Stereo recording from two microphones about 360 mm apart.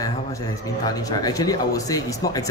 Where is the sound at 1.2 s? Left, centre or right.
Centre.